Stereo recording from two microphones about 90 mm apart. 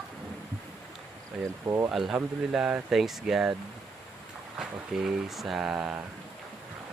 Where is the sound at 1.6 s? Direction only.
30° right (ahead or behind).